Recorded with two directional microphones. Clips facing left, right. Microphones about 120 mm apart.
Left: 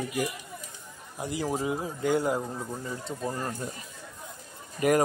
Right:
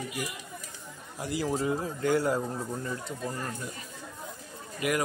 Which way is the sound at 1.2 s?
20° left (ahead or behind).